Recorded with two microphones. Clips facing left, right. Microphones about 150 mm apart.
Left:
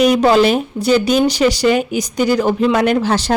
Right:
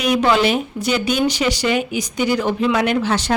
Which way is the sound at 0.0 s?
40° left (ahead or behind).